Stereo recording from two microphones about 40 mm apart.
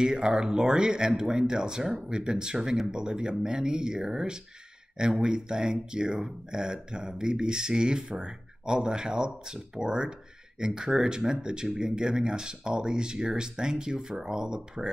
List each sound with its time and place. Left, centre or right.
0.0 s speech: centre